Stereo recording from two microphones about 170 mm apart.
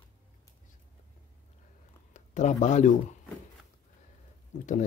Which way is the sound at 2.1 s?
45° left (ahead or behind).